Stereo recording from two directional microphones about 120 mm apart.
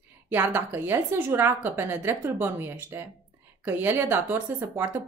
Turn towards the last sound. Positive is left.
turn(degrees=-20)  # may be behind; listen again after turning